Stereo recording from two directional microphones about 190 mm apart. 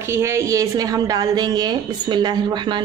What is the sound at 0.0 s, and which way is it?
Speech, 15° right (ahead or behind).